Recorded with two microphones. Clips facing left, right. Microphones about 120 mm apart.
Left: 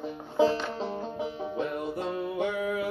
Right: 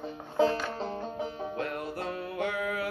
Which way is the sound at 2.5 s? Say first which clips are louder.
Left 2 dB; 60° right (ahead or behind).